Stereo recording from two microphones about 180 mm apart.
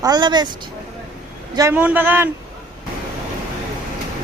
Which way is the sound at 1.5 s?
15° right (ahead or behind).